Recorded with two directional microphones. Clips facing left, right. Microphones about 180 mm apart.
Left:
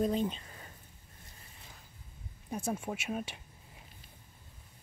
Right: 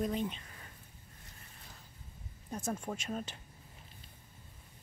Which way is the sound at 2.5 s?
10° left (ahead or behind).